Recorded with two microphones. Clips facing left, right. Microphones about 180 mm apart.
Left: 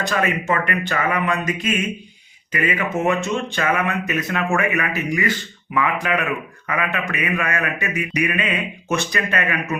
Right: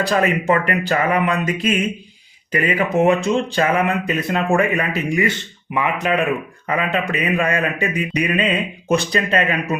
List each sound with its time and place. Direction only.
0.0 s speech: 35° right (ahead or behind)